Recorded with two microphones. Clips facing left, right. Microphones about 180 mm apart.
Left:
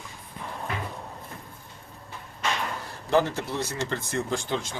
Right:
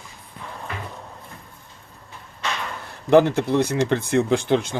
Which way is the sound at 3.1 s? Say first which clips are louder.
Right 9 dB; 60° right (ahead or behind).